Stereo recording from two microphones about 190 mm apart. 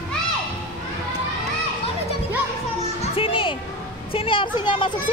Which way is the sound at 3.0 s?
30° left (ahead or behind).